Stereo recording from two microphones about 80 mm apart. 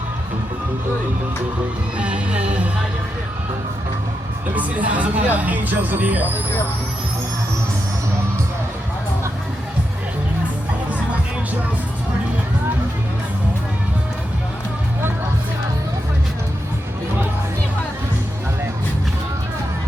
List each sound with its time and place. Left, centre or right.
2.0 s music: centre
4.8 s speech: centre